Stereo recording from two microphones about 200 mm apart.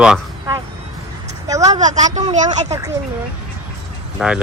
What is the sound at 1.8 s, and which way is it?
Speech, 35° right (ahead or behind).